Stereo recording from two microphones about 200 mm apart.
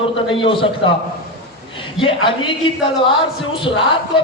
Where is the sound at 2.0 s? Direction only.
25° left (ahead or behind).